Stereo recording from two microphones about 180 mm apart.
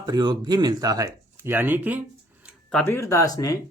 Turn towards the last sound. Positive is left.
turn(degrees=20)  # may be behind; listen again after turning